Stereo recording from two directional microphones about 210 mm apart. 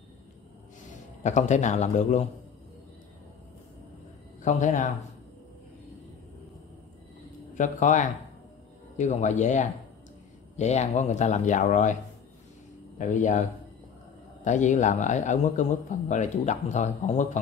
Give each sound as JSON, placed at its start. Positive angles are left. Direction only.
{"t": 1.2, "sound": "a man's voice", "side_deg": 35}
{"t": 4.4, "sound": "speech", "side_deg": 35}
{"t": 7.5, "sound": "a man's voice", "side_deg": 35}